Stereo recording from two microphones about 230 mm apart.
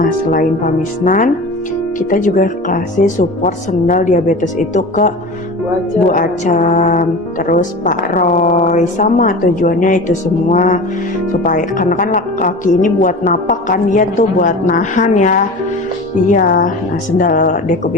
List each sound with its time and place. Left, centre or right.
0.0 s speech: left